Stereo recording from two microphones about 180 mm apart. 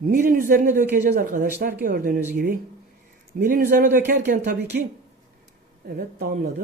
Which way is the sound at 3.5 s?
50° right (ahead or behind).